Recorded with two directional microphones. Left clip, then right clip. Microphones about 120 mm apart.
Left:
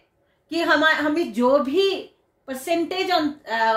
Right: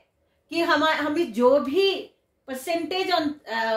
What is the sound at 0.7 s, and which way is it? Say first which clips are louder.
A woman's voice: left 4 dB; 50° right (ahead or behind).